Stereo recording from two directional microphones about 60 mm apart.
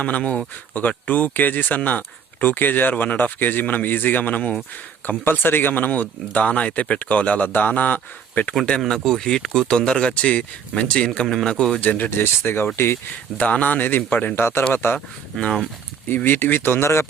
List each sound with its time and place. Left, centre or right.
0.8 s speech: left
5.0 s speech: left
8.9 s speech: centre
11.8 s speech: left
13.4 s speech: left
14.9 s speech: centre
16.0 s speech: left